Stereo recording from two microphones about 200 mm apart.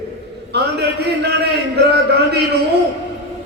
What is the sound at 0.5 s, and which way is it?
Speech, 55° right (ahead or behind).